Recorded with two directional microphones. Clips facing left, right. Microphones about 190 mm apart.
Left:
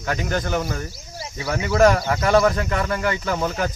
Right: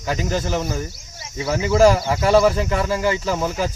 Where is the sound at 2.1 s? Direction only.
25° right (ahead or behind).